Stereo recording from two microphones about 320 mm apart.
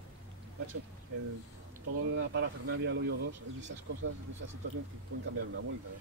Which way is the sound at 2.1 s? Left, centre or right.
Right.